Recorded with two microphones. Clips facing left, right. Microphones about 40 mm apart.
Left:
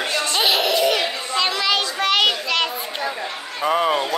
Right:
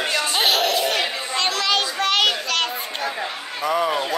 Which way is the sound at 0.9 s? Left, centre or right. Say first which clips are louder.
Left 2 dB; centre.